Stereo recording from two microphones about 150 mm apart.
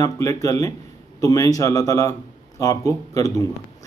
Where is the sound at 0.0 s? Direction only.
20° left (ahead or behind).